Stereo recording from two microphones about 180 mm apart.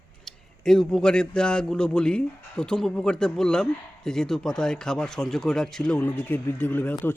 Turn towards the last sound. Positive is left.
turn(degrees=10)  # may be behind; listen again after turning